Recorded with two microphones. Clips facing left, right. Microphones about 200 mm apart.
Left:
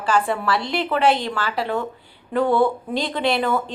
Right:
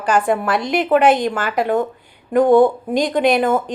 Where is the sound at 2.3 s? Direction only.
15° right (ahead or behind).